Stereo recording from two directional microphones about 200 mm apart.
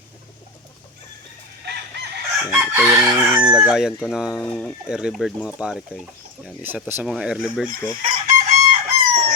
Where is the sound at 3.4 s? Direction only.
5° right (ahead or behind).